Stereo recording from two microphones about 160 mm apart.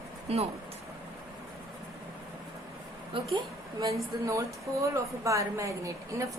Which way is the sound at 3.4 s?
20° right (ahead or behind).